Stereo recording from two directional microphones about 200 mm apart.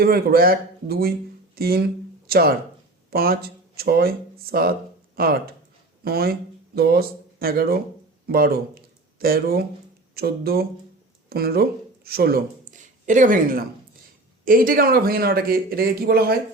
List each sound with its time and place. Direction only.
0.0 s speech: 50° right (ahead or behind)